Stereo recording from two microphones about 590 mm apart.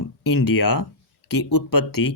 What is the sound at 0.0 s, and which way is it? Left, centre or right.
Speech, left.